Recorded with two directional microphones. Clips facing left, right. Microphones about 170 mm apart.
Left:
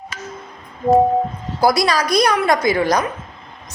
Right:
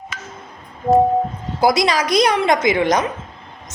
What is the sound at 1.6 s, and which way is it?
A woman's voice, 20° right (ahead or behind).